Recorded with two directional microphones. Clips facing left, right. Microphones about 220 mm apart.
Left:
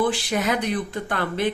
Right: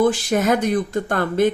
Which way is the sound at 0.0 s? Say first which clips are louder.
Right 5 dB; 45° right (ahead or behind).